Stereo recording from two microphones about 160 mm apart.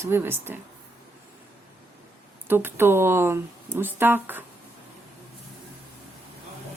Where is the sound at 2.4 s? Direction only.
15° right (ahead or behind).